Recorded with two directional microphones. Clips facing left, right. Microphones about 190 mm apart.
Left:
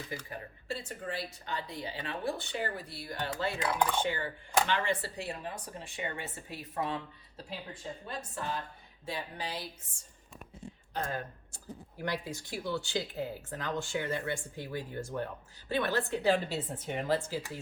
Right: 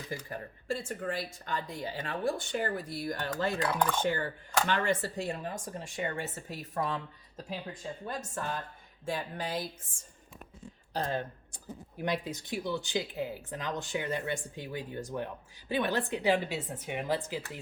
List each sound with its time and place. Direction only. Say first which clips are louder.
0.3 s speech: right 4 dB; 45° right (ahead or behind)
10.9 s speech: right 3 dB; 30° right (ahead or behind)